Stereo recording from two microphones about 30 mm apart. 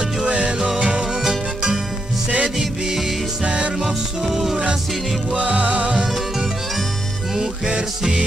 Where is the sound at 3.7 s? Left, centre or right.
Centre.